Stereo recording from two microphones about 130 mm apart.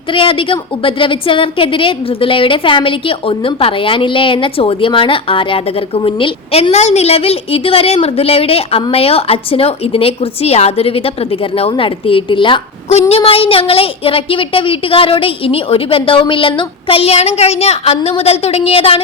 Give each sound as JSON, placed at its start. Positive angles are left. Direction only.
{"t": 0.1, "sound": "a woman's voice", "side_deg": 40}
{"t": 12.9, "sound": "a woman's voice", "side_deg": 50}